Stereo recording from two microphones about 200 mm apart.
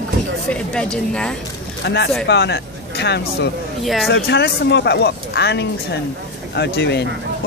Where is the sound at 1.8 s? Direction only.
60° left (ahead or behind).